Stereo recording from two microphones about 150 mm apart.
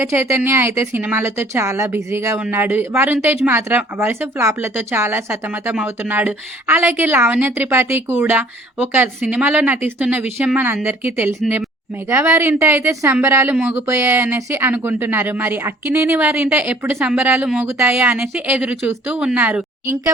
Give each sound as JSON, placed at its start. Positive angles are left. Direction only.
{"t": 0.0, "sound": "speech", "side_deg": -15}